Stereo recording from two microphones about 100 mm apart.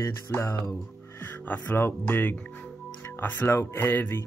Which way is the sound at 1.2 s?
15° left (ahead or behind).